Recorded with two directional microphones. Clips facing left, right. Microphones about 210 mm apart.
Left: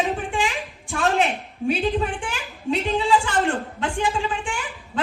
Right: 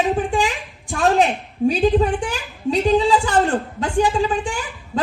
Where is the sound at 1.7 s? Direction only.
35° right (ahead or behind).